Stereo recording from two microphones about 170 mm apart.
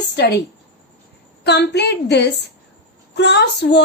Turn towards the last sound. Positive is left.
turn(degrees=85)